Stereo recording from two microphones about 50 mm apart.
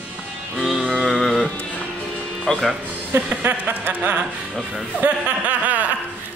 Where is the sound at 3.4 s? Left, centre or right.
Right.